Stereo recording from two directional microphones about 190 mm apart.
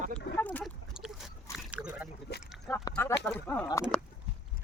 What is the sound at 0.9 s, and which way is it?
Dog, centre (ahead or behind).